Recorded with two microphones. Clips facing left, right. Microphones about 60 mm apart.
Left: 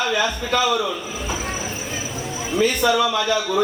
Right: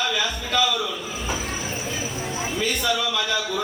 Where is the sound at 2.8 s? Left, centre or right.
Left.